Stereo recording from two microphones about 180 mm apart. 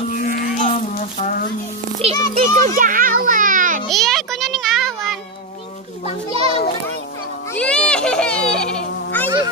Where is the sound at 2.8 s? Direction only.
50° right (ahead or behind).